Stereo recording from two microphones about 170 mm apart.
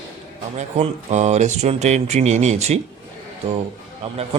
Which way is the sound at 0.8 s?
40° right (ahead or behind).